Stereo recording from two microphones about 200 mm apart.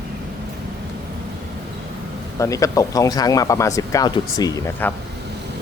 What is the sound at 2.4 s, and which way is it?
Speech, 15° left (ahead or behind).